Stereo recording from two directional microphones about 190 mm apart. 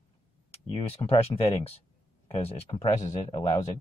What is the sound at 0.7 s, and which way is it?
Speech, 30° left (ahead or behind).